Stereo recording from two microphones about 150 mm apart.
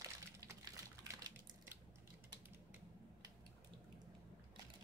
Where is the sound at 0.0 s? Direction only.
20° right (ahead or behind).